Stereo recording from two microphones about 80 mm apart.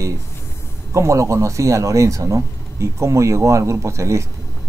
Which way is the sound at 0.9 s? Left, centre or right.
Right.